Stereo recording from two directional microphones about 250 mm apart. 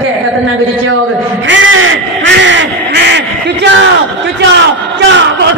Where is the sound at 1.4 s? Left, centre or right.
Right.